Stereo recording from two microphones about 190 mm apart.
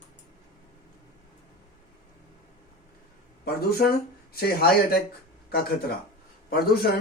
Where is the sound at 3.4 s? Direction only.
55° left (ahead or behind).